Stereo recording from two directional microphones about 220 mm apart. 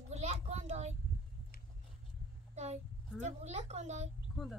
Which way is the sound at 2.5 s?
30° right (ahead or behind).